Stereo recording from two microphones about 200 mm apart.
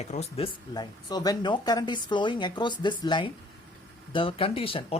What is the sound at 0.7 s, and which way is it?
Speech, 20° left (ahead or behind).